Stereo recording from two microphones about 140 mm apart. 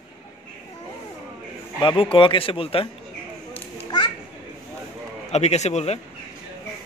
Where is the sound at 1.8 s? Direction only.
35° left (ahead or behind).